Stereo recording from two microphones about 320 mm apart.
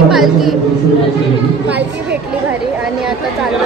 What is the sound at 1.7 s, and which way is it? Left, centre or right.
Speech, centre.